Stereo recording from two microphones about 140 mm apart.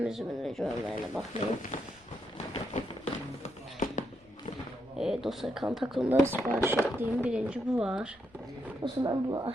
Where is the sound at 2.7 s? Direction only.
60° left (ahead or behind).